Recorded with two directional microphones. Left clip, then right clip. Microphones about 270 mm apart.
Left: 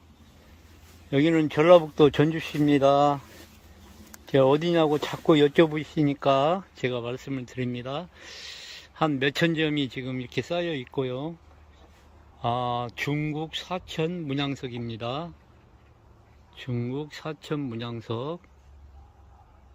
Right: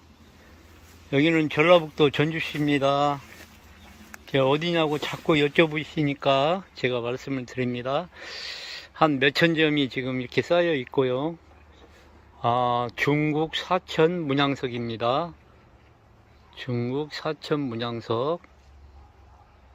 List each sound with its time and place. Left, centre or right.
1.1 s a man's voice: centre
4.3 s a man's voice: left; by 11.3 s centre
12.4 s speech: centre
16.6 s a man's voice: centre